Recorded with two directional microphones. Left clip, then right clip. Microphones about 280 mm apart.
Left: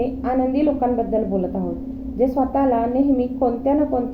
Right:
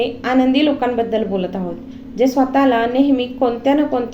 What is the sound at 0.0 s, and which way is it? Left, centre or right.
A woman's voice, right.